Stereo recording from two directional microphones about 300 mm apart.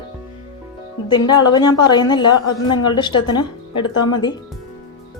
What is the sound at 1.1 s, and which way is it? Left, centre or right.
Speech, centre.